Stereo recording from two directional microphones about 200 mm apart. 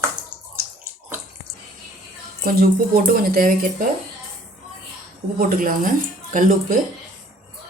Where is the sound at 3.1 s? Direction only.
45° right (ahead or behind).